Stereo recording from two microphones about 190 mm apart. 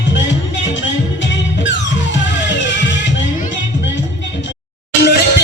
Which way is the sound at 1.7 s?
70° left (ahead or behind).